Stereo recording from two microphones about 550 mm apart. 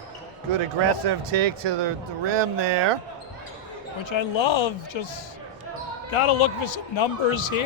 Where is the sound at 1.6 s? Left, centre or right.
Right.